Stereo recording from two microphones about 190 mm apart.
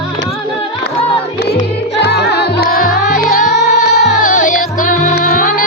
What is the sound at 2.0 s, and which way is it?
Music, 60° left (ahead or behind).